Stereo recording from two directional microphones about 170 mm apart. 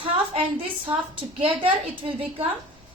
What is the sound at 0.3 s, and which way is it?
A woman's voice, 30° right (ahead or behind).